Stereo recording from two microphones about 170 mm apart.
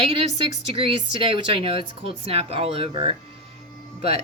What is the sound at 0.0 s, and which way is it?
Speech, 35° right (ahead or behind).